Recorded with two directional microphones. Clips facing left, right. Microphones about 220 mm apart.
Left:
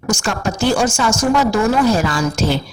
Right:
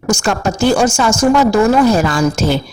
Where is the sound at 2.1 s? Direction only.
45° right (ahead or behind).